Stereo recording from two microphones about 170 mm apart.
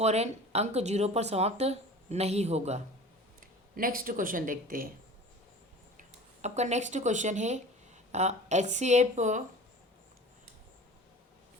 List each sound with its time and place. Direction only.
0.0 s speech: 40° right (ahead or behind)
3.8 s speech: 55° right (ahead or behind)
6.0 s speech: 40° right (ahead or behind)